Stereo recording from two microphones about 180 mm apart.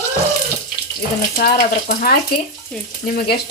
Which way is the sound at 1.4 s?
55° left (ahead or behind).